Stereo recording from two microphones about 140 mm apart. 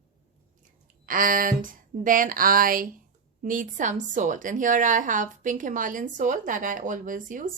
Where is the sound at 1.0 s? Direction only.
80° right.